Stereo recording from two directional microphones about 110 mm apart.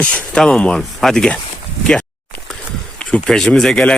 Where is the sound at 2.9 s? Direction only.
10° left (ahead or behind).